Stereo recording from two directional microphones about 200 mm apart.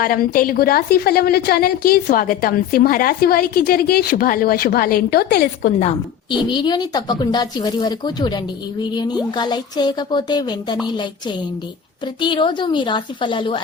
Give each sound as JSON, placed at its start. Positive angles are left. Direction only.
{"t": 0.0, "sound": "a woman's voice", "side_deg": 45}
{"t": 6.5, "sound": "speech", "side_deg": 20}
{"t": 12.2, "sound": "speech", "side_deg": 25}